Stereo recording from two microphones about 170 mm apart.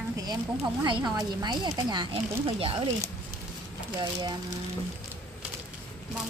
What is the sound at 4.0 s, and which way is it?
Speech, 25° right (ahead or behind).